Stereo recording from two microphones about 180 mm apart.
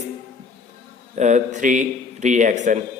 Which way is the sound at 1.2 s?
40° right (ahead or behind).